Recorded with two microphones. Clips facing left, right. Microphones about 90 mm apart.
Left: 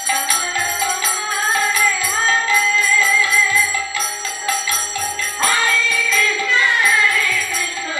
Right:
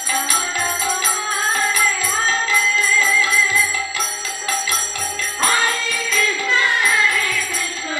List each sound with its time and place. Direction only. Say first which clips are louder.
5.5 s music: left 2 dB; 20° right (ahead or behind)